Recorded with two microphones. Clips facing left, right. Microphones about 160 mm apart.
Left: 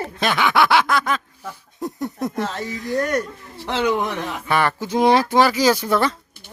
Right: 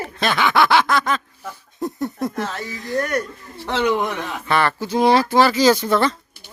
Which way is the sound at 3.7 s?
Centre (ahead or behind).